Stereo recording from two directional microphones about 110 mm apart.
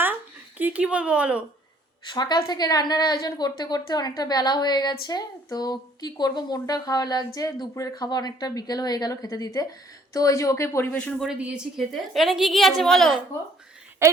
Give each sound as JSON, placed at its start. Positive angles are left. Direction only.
{"t": 0.6, "sound": "speech", "side_deg": -10}
{"t": 2.0, "sound": "a woman's voice", "side_deg": 40}
{"t": 10.9, "sound": "speech", "side_deg": 10}
{"t": 11.3, "sound": "a woman's voice", "side_deg": -10}
{"t": 14.0, "sound": "a woman's voice", "side_deg": -25}